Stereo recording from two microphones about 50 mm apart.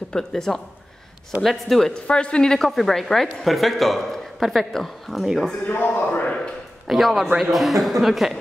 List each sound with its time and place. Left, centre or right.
0.1 s speech: centre
2.0 s speech: centre
2.7 s speech: centre
5.7 s a man's voice: left
6.2 s a sound: centre
6.9 s speech: centre